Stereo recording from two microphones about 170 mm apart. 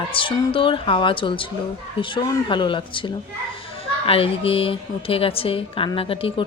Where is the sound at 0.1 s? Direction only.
30° left (ahead or behind).